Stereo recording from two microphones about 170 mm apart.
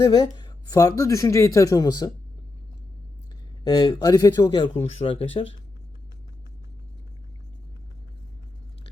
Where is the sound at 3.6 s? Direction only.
25° left (ahead or behind).